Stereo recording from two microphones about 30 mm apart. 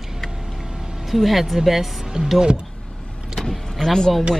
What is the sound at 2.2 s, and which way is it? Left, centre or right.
Speech, right.